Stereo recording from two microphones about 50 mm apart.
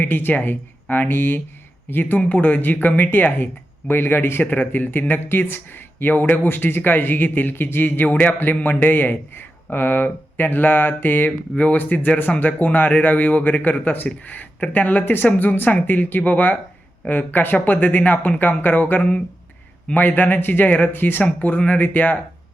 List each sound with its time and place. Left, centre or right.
0.0 s speech: left
2.3 s speech: left
11.5 s speech: left